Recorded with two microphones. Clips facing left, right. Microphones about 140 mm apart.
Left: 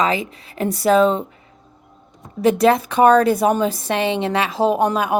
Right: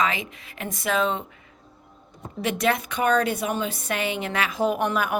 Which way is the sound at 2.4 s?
35° left (ahead or behind).